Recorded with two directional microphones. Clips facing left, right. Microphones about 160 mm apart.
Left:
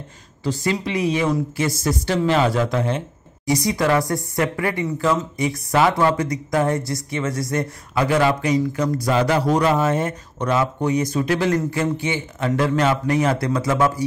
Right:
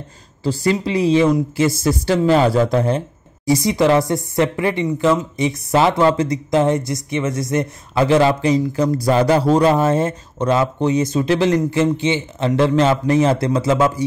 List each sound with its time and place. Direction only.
0.4 s speech: 30° right (ahead or behind)
3.4 s speech: 25° right (ahead or behind)